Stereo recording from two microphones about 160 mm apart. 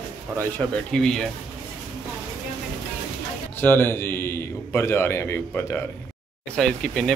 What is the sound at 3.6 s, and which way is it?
A man's voice, 15° left (ahead or behind).